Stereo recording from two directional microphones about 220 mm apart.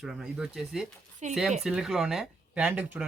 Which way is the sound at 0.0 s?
5° right (ahead or behind).